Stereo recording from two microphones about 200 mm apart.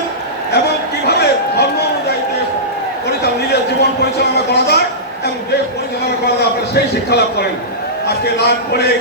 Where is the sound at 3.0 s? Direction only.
55° left (ahead or behind).